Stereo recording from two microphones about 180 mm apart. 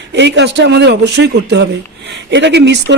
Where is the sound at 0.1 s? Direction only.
75° right (ahead or behind).